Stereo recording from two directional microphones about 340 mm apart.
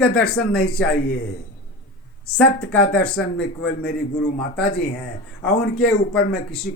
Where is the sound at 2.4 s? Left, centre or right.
Centre.